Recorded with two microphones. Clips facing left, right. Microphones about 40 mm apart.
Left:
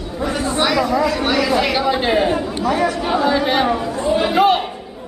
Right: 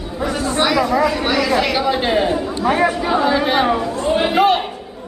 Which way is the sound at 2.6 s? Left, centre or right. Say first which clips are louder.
Right 3 dB; right.